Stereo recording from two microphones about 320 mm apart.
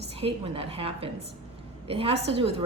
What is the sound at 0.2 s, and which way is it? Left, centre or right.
A woman's voice, centre.